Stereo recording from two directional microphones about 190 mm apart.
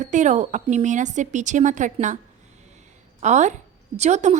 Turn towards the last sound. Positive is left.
turn(degrees=-35)  # may be behind; listen again after turning